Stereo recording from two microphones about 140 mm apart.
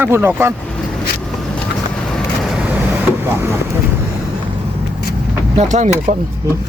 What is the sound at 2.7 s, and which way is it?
Vehicle, 10° right (ahead or behind).